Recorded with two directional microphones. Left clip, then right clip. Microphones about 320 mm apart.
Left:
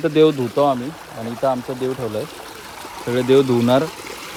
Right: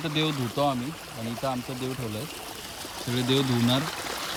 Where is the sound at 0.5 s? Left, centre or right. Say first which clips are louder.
Left 9 dB; left.